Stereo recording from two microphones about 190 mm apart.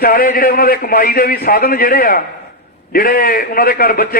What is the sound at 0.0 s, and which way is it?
A man's voice, 50° left (ahead or behind).